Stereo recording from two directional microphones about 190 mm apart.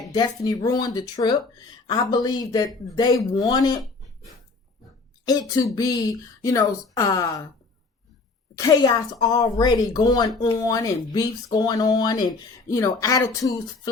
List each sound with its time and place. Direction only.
0.1 s speech: 20° left (ahead or behind)
8.5 s speech: 20° left (ahead or behind)